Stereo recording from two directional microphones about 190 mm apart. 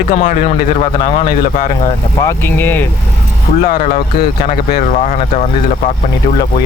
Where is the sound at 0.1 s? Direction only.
40° left (ahead or behind).